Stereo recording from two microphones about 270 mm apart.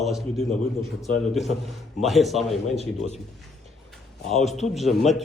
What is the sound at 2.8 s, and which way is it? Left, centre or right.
Speech, left.